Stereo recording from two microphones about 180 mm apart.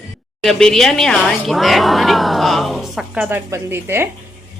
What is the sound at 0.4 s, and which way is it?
A woman's voice, centre (ahead or behind).